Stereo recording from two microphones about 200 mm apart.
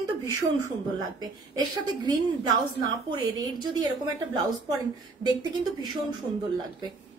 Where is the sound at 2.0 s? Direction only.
20° right (ahead or behind).